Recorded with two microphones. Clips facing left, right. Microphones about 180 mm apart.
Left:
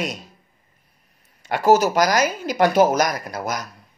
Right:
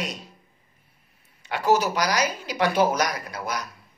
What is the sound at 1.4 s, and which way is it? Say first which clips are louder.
A woman's voice: left 5 dB; 45° left (ahead or behind).